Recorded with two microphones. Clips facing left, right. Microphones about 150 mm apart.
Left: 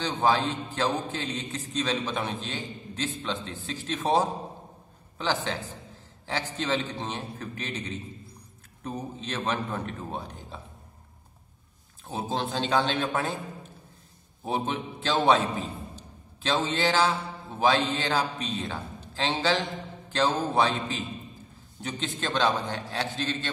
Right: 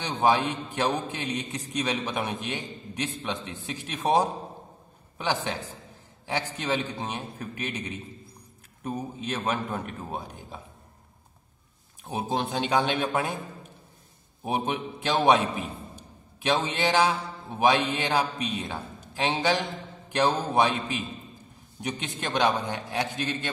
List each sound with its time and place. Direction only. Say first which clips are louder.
0.0 s a man's voice: right 1 dB; 15° right (ahead or behind)
12.1 s a man's voice: right 2 dB; 15° right (ahead or behind)
14.4 s a man's voice: right 1 dB; 15° right (ahead or behind)